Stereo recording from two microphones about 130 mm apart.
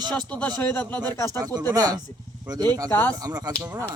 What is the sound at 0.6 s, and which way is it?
Speech, 15° left (ahead or behind).